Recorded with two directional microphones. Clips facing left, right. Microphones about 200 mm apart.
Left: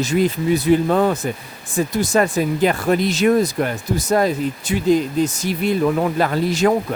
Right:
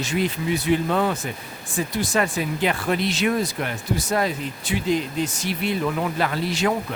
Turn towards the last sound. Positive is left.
turn(degrees=45)  # may be behind; listen again after turning